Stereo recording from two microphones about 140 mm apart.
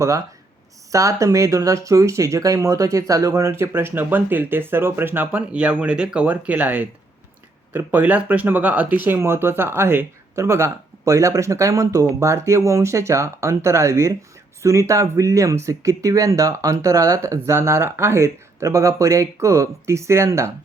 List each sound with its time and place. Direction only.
0.9 s speech: 25° right (ahead or behind)